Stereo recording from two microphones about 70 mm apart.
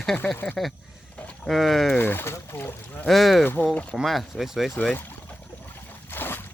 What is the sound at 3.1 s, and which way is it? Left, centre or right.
Speech, centre.